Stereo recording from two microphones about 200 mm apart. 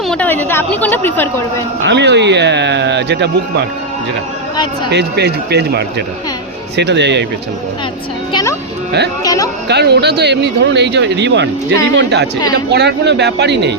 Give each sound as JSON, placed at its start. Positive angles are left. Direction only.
{"t": 0.1, "sound": "a woman's voice", "side_deg": 5}
{"t": 1.8, "sound": "speech", "side_deg": -60}
{"t": 4.9, "sound": "speech", "side_deg": -55}
{"t": 8.3, "sound": "a woman's voice", "side_deg": 20}
{"t": 9.6, "sound": "speech", "side_deg": -55}